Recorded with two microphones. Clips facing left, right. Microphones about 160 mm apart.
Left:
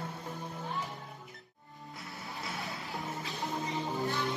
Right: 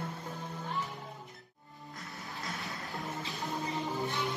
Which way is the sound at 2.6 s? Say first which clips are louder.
Left 1 dB; centre (ahead or behind).